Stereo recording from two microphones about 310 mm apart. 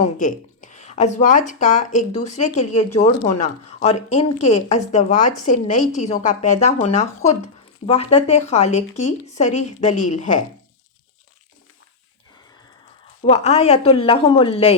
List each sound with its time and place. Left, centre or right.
0.0 s speech: left
13.2 s speech: centre